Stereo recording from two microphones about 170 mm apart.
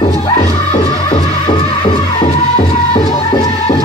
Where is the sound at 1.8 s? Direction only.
25° left (ahead or behind).